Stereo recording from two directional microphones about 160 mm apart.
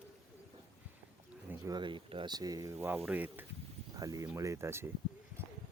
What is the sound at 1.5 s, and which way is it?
Speech, 25° right (ahead or behind).